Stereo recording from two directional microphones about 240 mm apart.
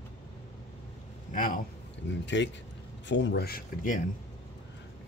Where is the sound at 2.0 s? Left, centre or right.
Left.